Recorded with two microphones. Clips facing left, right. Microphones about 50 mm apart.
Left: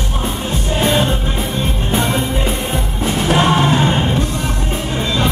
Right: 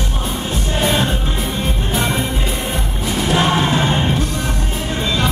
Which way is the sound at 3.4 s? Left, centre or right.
Left.